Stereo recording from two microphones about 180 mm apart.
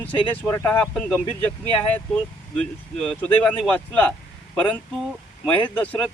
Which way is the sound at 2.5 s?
5° left (ahead or behind).